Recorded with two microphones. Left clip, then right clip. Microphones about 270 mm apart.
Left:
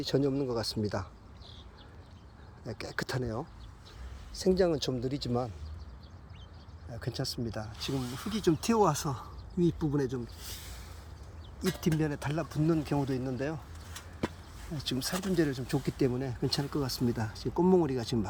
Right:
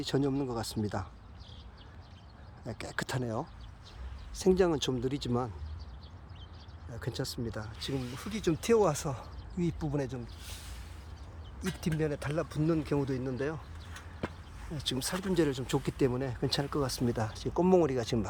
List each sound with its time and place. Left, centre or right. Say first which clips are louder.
0.0 s speech: left 2 dB; centre
2.6 s speech: left 1 dB; centre
4.4 s speech: even; centre
6.9 s speech: left 1 dB; centre
11.9 s speech: right 1 dB; centre
13.9 s a sound: left 3 dB; left
14.8 s speech: even; centre